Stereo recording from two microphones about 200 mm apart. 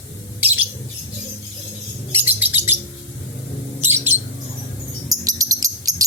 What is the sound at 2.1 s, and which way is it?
Bird, 10° right (ahead or behind).